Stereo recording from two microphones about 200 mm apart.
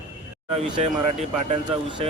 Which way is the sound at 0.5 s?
35° right (ahead or behind).